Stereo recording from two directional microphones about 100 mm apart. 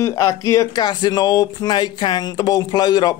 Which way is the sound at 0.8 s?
45° left (ahead or behind).